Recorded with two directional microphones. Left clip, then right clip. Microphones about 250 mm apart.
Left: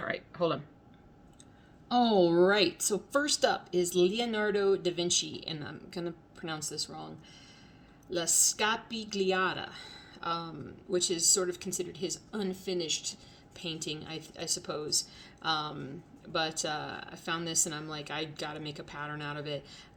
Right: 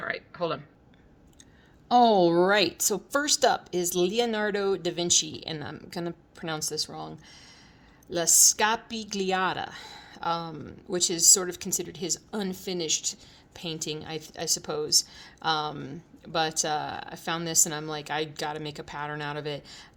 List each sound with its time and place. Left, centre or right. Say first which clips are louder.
0.0 s a sound: right 1 dB; centre
1.9 s a woman's voice: right 6 dB; right
8.1 s a woman's voice: right 7 dB; right